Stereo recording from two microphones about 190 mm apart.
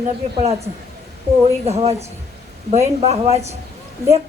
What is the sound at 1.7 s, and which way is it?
A woman's voice, 35° right (ahead or behind).